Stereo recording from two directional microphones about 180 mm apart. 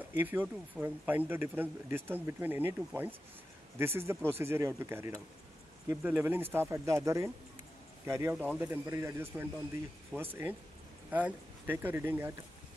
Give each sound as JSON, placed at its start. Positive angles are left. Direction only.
{"t": 0.2, "sound": "speech", "side_deg": -10}